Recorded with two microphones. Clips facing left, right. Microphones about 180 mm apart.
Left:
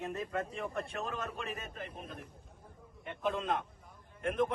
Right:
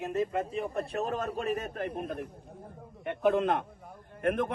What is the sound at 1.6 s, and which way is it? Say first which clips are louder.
A man's voice: right 10 dB; 55° right (ahead or behind).